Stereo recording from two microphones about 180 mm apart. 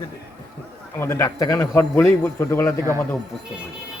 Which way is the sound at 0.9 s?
15° left (ahead or behind).